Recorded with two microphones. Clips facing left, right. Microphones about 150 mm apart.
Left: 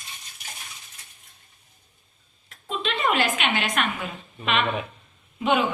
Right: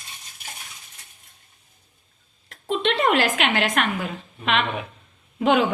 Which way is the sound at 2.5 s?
85° right.